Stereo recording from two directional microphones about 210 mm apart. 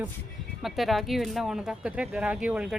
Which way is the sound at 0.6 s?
Centre (ahead or behind).